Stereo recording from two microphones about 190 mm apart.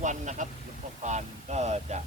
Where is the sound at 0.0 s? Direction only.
40° right (ahead or behind).